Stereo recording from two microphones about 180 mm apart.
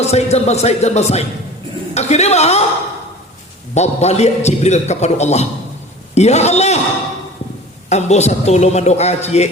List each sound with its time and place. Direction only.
0.0 s a man's voice: 35° left (ahead or behind)
3.8 s a man's voice: 40° left (ahead or behind)
7.9 s a man's voice: 40° left (ahead or behind)